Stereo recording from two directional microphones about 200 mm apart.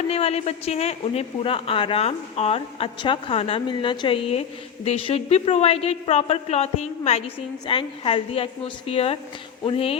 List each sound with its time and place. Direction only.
0.1 s a woman's voice: 30° left (ahead or behind)